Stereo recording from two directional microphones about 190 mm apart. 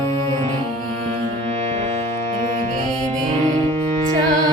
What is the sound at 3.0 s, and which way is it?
Music, 35° right (ahead or behind).